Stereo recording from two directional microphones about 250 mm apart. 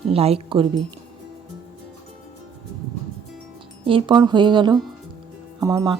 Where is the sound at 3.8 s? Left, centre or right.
Centre.